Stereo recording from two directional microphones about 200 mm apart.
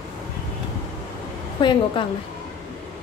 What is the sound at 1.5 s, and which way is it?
Speech, 25° left (ahead or behind).